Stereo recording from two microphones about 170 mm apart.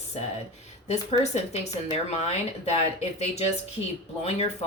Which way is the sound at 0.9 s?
40° left (ahead or behind).